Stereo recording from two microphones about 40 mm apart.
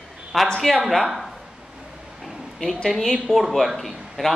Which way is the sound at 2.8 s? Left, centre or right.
Centre.